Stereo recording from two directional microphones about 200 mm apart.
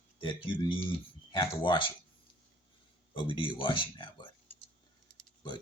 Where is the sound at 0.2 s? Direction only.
25° left (ahead or behind).